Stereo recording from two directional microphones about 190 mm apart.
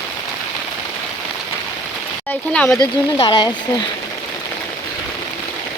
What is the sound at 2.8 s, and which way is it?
Speech, 25° left (ahead or behind).